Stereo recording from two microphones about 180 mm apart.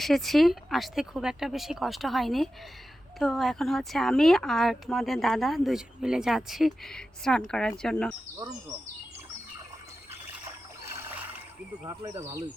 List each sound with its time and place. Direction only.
0.0 s speech: centre (ahead or behind)
10.1 s trickle: 15° right (ahead or behind)
11.8 s speech: 15° right (ahead or behind)